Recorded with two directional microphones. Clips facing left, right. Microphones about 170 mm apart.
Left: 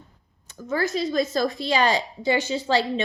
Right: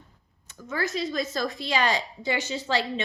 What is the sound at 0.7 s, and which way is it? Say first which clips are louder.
A woman's voice: left 5 dB; 35° left (ahead or behind).